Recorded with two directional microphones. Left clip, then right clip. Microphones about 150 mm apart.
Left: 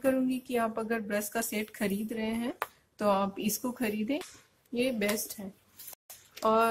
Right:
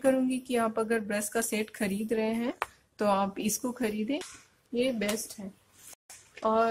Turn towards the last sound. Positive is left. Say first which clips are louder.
# even
turn(degrees=5)  # may be behind; listen again after turning